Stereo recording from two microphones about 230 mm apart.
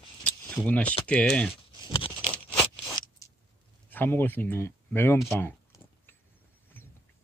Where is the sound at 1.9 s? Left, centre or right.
Left.